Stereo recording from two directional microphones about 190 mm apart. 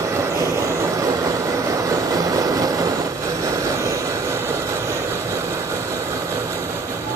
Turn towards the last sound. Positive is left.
turn(degrees=-15)  # may be behind; listen again after turning